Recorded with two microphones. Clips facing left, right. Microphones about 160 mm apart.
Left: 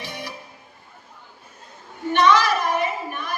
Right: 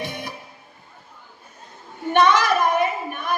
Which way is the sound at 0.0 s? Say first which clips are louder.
Right 3 dB; 55° right (ahead or behind).